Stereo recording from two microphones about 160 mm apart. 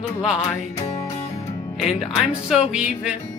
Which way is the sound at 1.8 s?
Centre (ahead or behind).